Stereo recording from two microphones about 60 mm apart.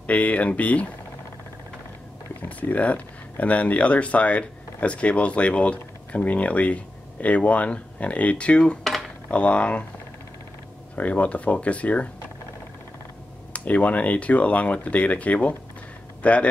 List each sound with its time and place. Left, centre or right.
0.0 s speech: left
2.4 s speech: left
11.0 s speech: left
13.5 s speech: left